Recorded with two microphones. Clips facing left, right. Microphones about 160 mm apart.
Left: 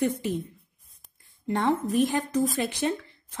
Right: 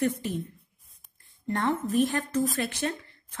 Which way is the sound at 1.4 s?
20° left (ahead or behind).